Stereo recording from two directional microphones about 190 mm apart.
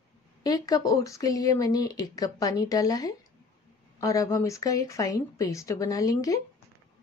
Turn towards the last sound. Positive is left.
turn(degrees=15)  # may be behind; listen again after turning